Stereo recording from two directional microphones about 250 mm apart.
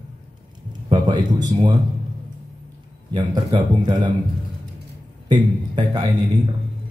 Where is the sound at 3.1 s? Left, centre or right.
Centre.